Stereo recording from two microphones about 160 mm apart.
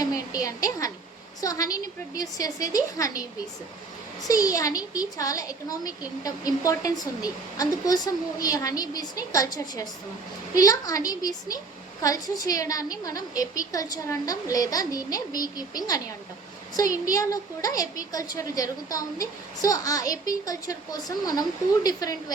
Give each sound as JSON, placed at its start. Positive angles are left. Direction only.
{"t": 0.0, "sound": "a woman's voice", "side_deg": 20}